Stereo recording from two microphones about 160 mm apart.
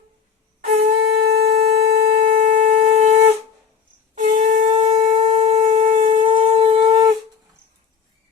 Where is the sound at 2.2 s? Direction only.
50° right (ahead or behind).